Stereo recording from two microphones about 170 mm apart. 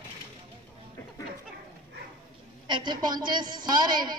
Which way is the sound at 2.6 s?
25° right (ahead or behind).